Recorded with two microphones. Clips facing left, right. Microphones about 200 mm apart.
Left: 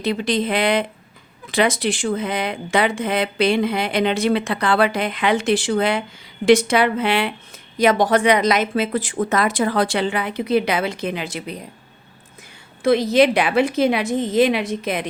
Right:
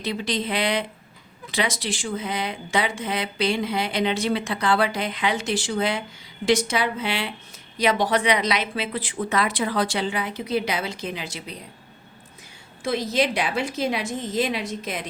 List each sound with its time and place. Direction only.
0.0 s speech: 55° left (ahead or behind)
12.8 s speech: 65° left (ahead or behind)